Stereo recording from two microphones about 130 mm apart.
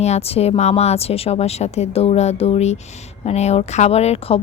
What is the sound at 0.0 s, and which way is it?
A woman's voice, 55° left (ahead or behind).